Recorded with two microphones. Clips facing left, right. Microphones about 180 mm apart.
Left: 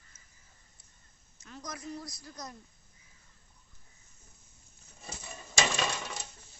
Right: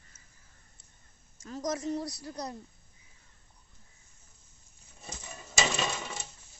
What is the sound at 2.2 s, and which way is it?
Speech, 35° right (ahead or behind).